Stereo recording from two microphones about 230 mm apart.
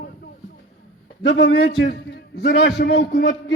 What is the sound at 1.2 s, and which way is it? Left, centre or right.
A man's voice, left.